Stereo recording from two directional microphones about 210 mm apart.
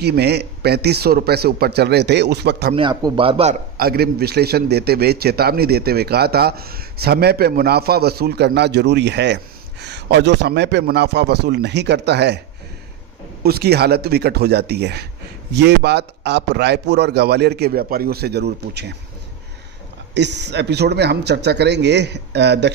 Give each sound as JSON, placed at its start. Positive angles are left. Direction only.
{"t": 0.0, "sound": "a man's voice", "side_deg": -50}
{"t": 2.7, "sound": "a man's voice", "side_deg": -20}
{"t": 3.7, "sound": "a man's voice", "side_deg": -45}
{"t": 13.4, "sound": "a man's voice", "side_deg": -50}
{"t": 20.2, "sound": "a man's voice", "side_deg": -55}